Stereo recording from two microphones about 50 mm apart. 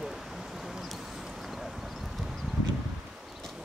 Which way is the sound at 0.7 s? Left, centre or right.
Centre.